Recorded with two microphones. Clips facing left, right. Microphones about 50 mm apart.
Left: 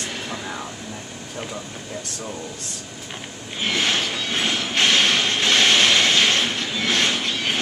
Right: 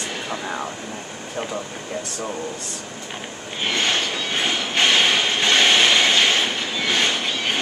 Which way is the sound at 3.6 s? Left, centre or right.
Centre.